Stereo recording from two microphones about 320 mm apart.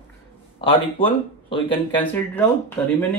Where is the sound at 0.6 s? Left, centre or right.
Centre.